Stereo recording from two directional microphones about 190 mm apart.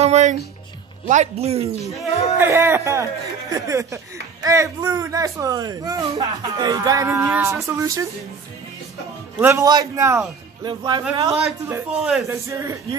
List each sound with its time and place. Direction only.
0.0 s speech: 35° right (ahead or behind)
2.3 s speech: 10° right (ahead or behind)
9.4 s a man's voice: 15° right (ahead or behind)
12.0 s speech: 5° right (ahead or behind)
12.4 s speech: 15° right (ahead or behind)